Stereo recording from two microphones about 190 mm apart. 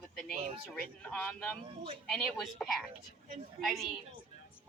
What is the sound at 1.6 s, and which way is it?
Speech, 30° right (ahead or behind).